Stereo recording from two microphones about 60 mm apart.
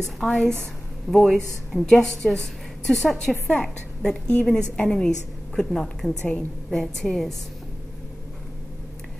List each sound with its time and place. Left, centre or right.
0.0 s a woman's voice: centre
6.2 s a woman's voice: centre
6.8 s a woman's voice: centre